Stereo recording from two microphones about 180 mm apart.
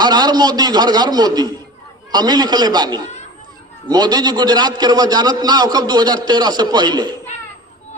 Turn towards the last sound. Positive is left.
turn(degrees=-25)  # may be behind; listen again after turning